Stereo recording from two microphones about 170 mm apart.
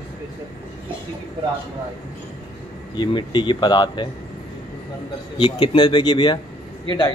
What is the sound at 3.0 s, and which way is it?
Speech, 25° left (ahead or behind).